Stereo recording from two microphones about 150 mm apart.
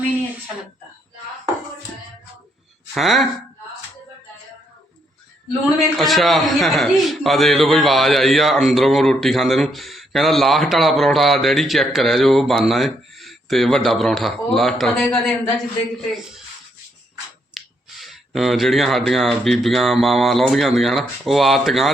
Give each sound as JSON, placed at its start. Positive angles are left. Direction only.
{"t": 2.9, "sound": "a man's voice", "side_deg": 0}
{"t": 6.0, "sound": "a man's voice", "side_deg": 0}
{"t": 17.5, "sound": "a man's voice", "side_deg": 0}